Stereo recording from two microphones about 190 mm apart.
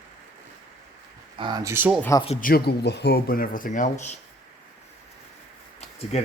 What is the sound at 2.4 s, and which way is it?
Speech, 55° left (ahead or behind).